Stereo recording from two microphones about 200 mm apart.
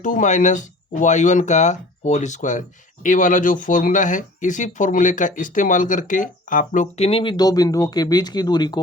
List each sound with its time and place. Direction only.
0.0 s speech: 40° left (ahead or behind); by 8.8 s 20° left (ahead or behind)